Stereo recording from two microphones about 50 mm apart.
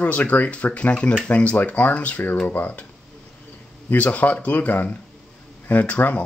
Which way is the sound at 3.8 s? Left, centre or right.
Left.